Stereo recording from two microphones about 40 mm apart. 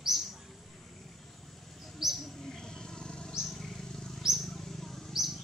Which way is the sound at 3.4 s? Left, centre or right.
Centre.